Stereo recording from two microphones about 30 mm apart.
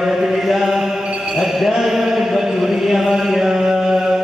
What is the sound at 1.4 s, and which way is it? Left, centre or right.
Mantra, centre.